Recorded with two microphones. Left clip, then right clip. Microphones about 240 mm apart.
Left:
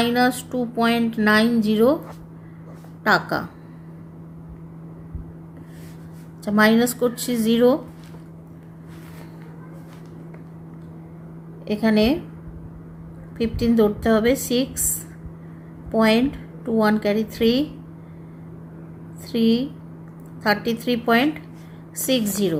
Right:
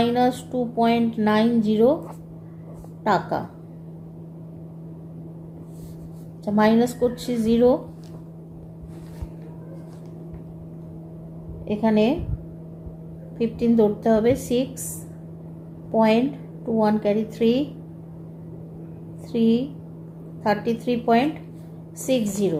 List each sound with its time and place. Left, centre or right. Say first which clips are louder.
0.0 s speech: left 1 dB; left
3.0 s speech: left 3 dB; left
6.4 s speech: left 2 dB; left
11.7 s speech: left 1 dB; left
13.4 s speech: even; left
15.9 s speech: left 1 dB; left
19.3 s speech: left 1 dB; left